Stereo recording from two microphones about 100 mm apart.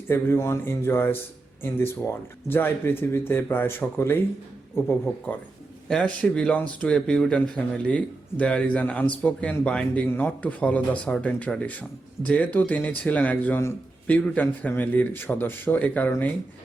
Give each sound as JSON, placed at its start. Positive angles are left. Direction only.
{"t": 0.1, "sound": "speech", "side_deg": 25}
{"t": 2.5, "sound": "speech", "side_deg": 20}
{"t": 5.3, "sound": "a man's voice", "side_deg": 15}